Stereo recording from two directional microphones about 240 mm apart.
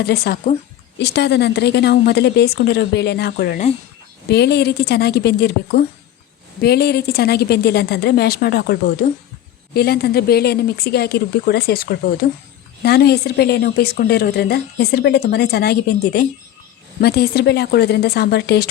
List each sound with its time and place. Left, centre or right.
0.0 s a woman's voice: left